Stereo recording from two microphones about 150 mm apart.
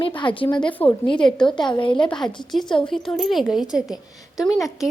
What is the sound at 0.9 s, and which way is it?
A woman's voice, 30° left (ahead or behind).